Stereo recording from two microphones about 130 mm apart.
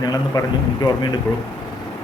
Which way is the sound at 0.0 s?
30° left (ahead or behind).